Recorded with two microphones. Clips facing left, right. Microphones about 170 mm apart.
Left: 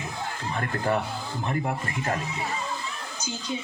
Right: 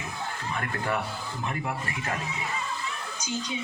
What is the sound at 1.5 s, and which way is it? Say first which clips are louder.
Speech: left 4 dB; 30° left (ahead or behind).